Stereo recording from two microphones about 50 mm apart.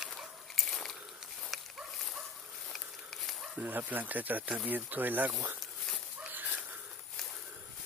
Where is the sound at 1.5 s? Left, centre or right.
Centre.